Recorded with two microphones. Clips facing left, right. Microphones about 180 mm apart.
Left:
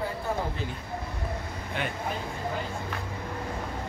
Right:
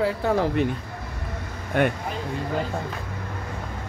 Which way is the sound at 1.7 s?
50° right (ahead or behind).